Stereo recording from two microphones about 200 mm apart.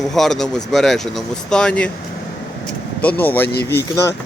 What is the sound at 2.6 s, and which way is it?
Vehicle, 10° left (ahead or behind).